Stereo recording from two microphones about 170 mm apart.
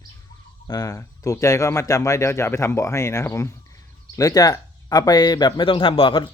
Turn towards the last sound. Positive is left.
turn(degrees=30)  # may be behind; listen again after turning